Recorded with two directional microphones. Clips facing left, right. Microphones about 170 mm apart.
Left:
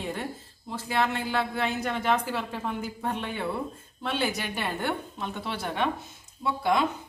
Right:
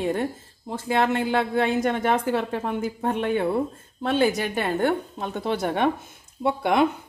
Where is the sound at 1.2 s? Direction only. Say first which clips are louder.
Right 6 dB; 20° right (ahead or behind).